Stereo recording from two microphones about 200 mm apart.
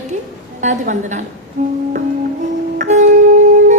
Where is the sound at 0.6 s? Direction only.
35° right (ahead or behind).